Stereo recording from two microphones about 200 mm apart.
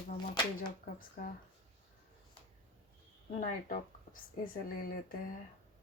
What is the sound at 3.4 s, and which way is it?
Speech, 45° left (ahead or behind).